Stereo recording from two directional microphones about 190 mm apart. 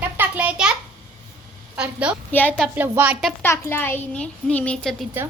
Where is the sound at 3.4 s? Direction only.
10° left (ahead or behind).